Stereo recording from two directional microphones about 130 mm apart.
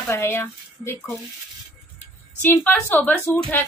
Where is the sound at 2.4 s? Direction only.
15° left (ahead or behind).